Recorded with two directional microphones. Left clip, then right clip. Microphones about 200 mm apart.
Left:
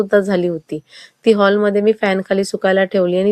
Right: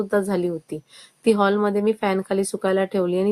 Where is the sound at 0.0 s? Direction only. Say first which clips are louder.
Left 7 dB; 15° left (ahead or behind).